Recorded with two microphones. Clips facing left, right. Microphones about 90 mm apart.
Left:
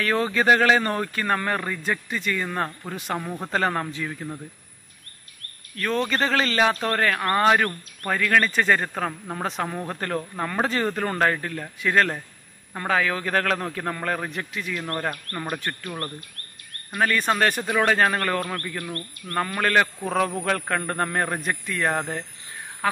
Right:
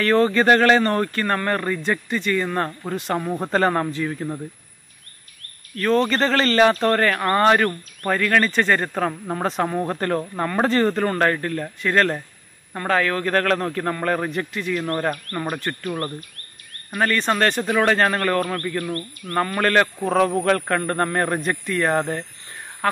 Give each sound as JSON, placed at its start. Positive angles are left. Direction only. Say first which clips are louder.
{"t": 0.0, "sound": "speech", "louder": "right 5 dB", "side_deg": 5}
{"t": 5.8, "sound": "speech", "louder": "right 5 dB", "side_deg": 0}
{"t": 18.9, "sound": "speech", "louder": "right 5 dB", "side_deg": -20}
{"t": 19.3, "sound": "speech", "louder": "right 3 dB", "side_deg": 0}